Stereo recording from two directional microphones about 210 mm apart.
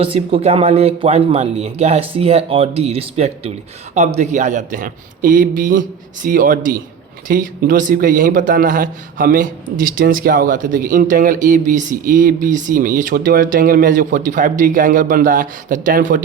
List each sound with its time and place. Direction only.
0.0 s a man's voice: 25° right (ahead or behind)